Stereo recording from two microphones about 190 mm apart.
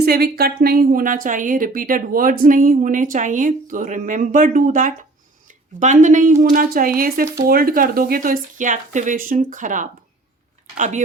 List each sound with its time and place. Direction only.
0.0 s a woman's voice: 55° right (ahead or behind); by 11.0 s 40° right (ahead or behind)